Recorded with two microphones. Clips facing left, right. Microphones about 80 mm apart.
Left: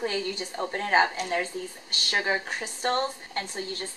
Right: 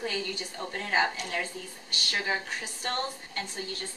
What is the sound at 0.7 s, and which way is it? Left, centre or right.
A woman's voice, left.